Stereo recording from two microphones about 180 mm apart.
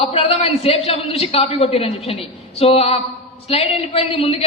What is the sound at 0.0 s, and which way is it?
A woman's voice, 30° left (ahead or behind).